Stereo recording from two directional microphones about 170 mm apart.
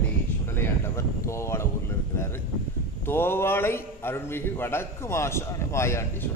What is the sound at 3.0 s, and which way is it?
Speech, 15° left (ahead or behind).